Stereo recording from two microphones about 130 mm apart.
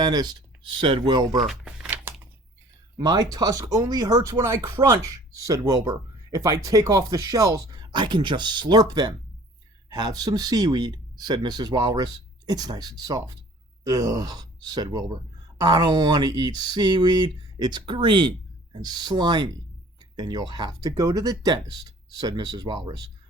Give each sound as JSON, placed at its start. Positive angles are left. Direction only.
{"t": 0.0, "sound": "speech", "side_deg": -35}
{"t": 1.5, "sound": "a sound", "side_deg": -5}
{"t": 3.0, "sound": "speech", "side_deg": -30}